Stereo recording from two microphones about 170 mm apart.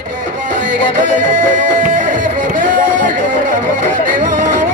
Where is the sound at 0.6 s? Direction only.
50° right (ahead or behind).